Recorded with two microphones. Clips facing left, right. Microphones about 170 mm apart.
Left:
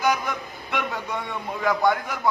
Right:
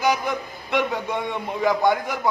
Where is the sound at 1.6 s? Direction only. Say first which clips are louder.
Right 2 dB; 10° right (ahead or behind).